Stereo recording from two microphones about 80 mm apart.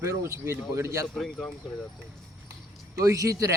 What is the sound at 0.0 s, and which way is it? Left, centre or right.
Speech, right.